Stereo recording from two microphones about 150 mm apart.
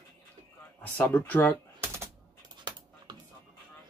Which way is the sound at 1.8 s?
15° right (ahead or behind).